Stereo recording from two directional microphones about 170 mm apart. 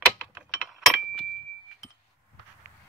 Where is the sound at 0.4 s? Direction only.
Centre (ahead or behind).